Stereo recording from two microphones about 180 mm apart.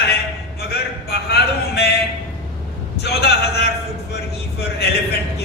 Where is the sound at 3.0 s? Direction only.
65° left (ahead or behind).